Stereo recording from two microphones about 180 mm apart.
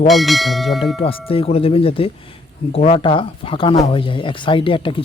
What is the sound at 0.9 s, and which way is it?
Speech, 30° left (ahead or behind).